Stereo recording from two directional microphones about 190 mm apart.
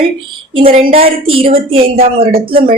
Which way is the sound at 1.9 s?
50° right (ahead or behind).